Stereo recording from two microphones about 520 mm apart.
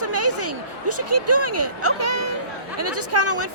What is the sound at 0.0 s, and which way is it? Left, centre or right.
Speech, right.